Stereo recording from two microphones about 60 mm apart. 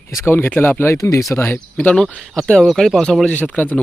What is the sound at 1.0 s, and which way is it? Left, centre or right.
Speech, left.